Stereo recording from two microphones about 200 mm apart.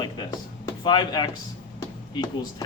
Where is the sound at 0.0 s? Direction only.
20° left (ahead or behind).